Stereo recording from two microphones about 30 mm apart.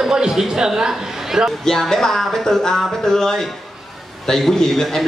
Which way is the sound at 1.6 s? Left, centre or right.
Centre.